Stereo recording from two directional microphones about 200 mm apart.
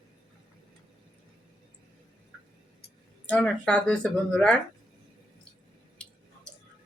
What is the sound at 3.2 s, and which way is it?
Speech, 5° left (ahead or behind).